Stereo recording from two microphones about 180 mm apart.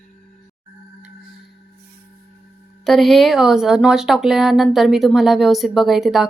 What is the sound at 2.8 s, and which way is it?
Speech, centre (ahead or behind).